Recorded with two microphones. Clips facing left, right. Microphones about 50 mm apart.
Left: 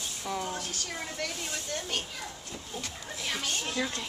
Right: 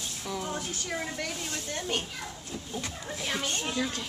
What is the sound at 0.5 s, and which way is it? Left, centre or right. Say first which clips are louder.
Speech: right 3 dB; centre.